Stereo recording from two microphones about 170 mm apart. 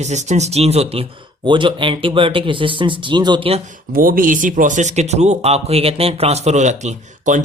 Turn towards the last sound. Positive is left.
turn(degrees=-45)  # may be behind; listen again after turning